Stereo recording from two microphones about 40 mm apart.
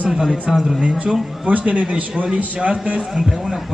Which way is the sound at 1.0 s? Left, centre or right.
Right.